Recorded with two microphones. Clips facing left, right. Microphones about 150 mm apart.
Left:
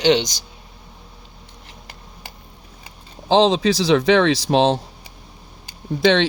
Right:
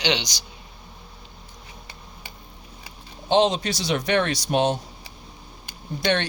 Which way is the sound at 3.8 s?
90° left.